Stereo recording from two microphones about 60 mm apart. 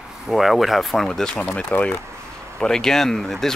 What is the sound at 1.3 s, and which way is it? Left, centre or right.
Speech, left.